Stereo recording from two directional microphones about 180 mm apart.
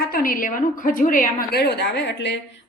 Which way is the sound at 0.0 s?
55° left (ahead or behind).